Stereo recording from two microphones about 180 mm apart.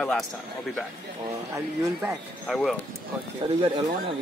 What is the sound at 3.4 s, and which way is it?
Speech, 25° right (ahead or behind).